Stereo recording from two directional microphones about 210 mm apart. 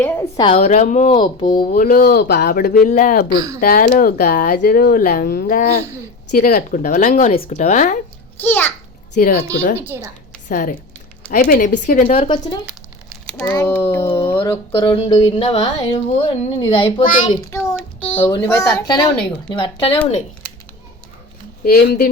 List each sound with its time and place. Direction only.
0.0 s a sound: 10° left (ahead or behind)
0.5 s speech: 35° left (ahead or behind)
1.5 s speech: 40° left (ahead or behind)
8.4 s speech: 10° left (ahead or behind)
9.1 s speech: 40° left (ahead or behind)
13.2 s a sound: 5° left (ahead or behind)
13.5 s speech: 15° left (ahead or behind)
15.0 s speech: 30° left (ahead or behind)
17.5 s a child's voice: 10° left (ahead or behind)
17.7 s child singing: 5° left (ahead or behind)
18.3 s speech: 10° left (ahead or behind)
21.6 s speech: 45° left (ahead or behind)